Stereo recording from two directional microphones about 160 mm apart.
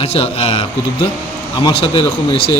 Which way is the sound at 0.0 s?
40° left (ahead or behind).